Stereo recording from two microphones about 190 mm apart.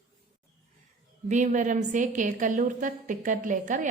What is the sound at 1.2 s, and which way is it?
A woman's voice, 40° right (ahead or behind).